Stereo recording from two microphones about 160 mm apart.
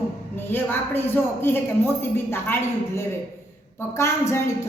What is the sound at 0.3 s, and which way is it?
A woman's voice, 15° left (ahead or behind).